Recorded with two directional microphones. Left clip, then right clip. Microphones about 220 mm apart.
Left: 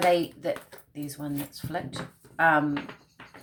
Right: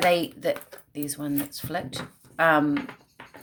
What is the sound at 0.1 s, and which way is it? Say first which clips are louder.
Speech: right 1 dB; 50° right (ahead or behind).